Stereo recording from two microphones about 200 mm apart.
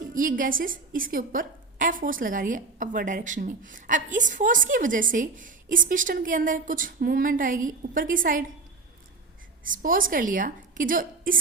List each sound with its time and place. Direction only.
0.1 s a woman's voice: 40° right (ahead or behind)
9.6 s a woman's voice: 45° right (ahead or behind)